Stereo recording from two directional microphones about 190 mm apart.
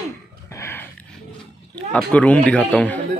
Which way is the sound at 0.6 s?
15° left (ahead or behind).